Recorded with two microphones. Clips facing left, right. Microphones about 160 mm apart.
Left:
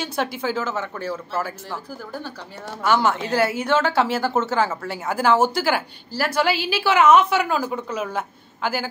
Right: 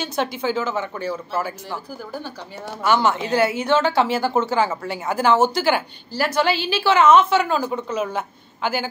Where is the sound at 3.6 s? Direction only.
5° left (ahead or behind).